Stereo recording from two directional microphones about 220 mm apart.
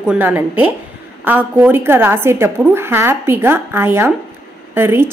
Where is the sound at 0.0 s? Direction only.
5° right (ahead or behind).